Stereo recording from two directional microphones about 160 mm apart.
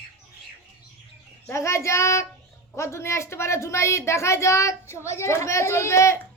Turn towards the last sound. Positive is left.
turn(degrees=15)  # may be behind; listen again after turning